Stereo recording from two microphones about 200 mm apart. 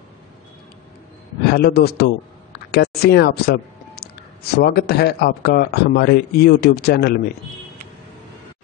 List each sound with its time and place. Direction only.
1.4 s a man's voice: 50° left (ahead or behind)